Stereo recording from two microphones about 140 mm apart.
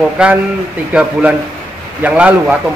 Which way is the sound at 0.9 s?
10° right (ahead or behind).